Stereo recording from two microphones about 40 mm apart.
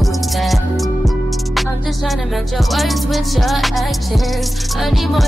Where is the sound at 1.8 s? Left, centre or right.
Centre.